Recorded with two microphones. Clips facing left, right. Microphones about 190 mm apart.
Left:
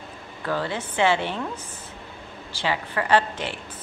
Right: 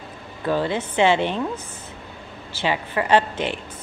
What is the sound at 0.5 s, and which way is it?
Speech, 15° right (ahead or behind).